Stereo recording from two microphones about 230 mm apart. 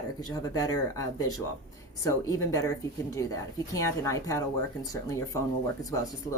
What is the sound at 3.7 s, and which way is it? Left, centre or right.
Speech, centre.